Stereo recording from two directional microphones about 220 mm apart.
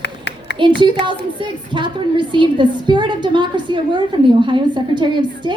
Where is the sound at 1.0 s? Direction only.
20° right (ahead or behind).